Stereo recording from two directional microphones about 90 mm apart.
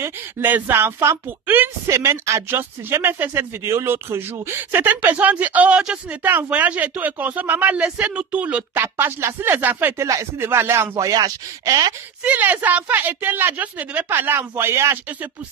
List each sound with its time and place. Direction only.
0.0 s speech: 20° right (ahead or behind)
8.8 s speech: 25° right (ahead or behind); by 11.9 s 45° right (ahead or behind)
12.2 s speech: 15° right (ahead or behind)